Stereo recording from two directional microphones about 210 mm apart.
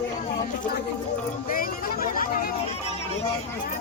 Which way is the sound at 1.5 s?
40° left (ahead or behind).